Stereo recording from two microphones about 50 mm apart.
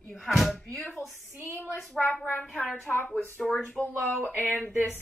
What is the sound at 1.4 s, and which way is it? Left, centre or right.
Speech, right.